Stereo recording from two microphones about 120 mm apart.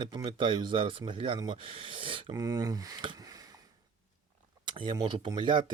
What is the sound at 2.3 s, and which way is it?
Speech, 30° right (ahead or behind).